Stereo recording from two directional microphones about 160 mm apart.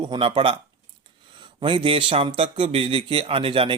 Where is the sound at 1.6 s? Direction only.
35° right (ahead or behind).